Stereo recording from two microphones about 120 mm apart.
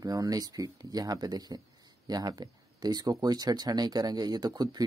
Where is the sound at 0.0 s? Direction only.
30° right (ahead or behind).